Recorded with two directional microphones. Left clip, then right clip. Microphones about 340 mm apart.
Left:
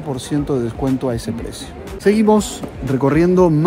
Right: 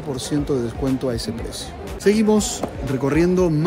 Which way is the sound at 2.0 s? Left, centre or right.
Centre.